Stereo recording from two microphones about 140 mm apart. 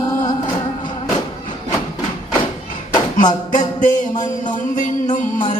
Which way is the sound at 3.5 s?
65° left (ahead or behind).